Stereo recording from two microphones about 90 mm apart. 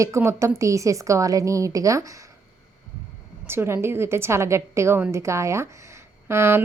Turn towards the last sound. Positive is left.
turn(degrees=-30)  # may be behind; listen again after turning